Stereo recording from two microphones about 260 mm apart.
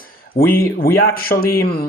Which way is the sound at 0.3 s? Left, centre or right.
Left.